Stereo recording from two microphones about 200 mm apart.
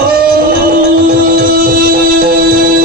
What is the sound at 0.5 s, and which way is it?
Music, 50° right (ahead or behind).